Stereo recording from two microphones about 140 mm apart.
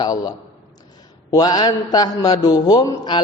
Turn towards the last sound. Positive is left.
turn(degrees=30)  # may be behind; listen again after turning